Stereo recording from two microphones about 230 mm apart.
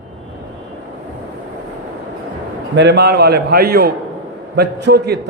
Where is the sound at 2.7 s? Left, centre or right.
Right.